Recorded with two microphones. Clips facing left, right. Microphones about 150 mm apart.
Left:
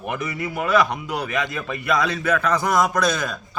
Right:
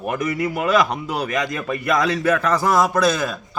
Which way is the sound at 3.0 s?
5° right (ahead or behind).